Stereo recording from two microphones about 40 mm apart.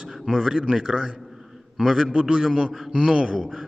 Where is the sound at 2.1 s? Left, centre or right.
Centre.